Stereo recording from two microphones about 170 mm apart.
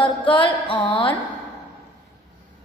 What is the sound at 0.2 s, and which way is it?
Speech, 30° left (ahead or behind).